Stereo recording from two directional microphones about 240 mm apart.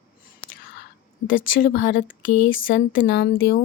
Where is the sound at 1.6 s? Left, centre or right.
Left.